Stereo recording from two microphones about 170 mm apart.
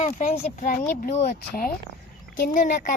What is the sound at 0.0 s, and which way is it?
Speech, 45° left (ahead or behind).